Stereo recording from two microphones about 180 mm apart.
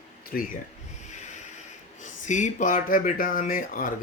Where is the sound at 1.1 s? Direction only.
40° left (ahead or behind).